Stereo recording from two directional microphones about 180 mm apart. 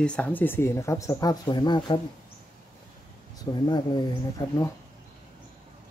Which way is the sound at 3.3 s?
20° left (ahead or behind).